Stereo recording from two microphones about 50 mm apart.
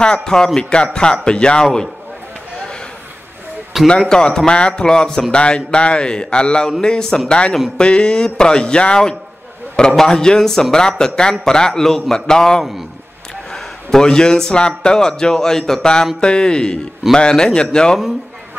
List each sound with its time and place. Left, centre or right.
0.0 s speech: centre
3.8 s a man's voice: centre